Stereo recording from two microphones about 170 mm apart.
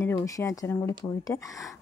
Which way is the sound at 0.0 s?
15° left (ahead or behind).